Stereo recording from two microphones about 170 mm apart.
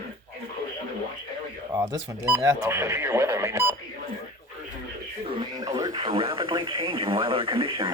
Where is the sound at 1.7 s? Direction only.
25° right (ahead or behind).